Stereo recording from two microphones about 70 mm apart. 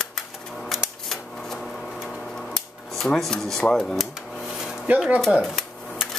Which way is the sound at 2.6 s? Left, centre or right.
Centre.